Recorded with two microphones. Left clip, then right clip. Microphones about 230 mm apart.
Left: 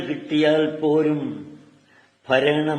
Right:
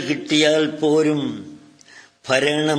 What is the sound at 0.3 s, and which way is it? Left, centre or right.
Speech, right.